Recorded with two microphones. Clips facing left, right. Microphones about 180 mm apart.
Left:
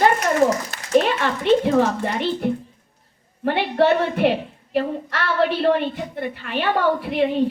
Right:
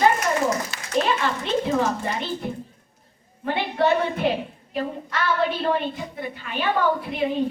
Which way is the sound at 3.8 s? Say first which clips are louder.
Left 4 dB; 75° left (ahead or behind).